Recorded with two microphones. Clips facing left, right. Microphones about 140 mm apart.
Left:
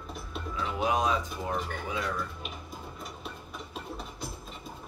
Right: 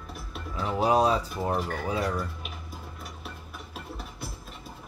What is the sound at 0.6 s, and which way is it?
Speech, 35° right (ahead or behind).